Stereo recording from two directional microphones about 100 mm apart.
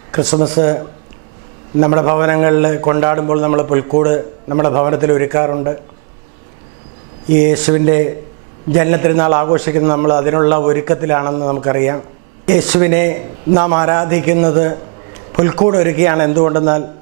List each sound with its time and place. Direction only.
0.1 s a man's voice: 10° right (ahead or behind)
7.3 s a man's voice: 10° right (ahead or behind)